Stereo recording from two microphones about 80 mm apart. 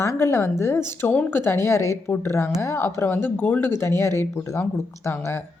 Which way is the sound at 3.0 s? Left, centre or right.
Left.